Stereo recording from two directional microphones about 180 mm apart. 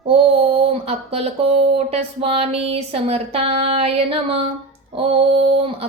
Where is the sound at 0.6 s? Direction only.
35° right (ahead or behind).